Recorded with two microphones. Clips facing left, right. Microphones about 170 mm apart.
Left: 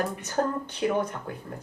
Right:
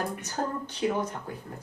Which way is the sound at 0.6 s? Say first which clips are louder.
Left 2 dB; 60° left (ahead or behind).